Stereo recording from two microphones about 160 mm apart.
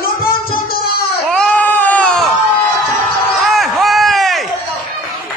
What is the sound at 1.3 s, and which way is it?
Baby cry, 5° left (ahead or behind).